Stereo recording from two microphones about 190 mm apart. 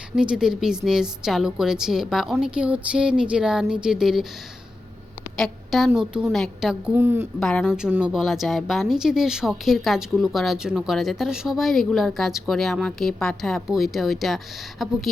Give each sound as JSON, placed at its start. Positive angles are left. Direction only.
{"t": 0.2, "sound": "a woman's voice", "side_deg": -5}
{"t": 5.4, "sound": "a woman's voice", "side_deg": 0}
{"t": 7.3, "sound": "a woman's voice", "side_deg": 0}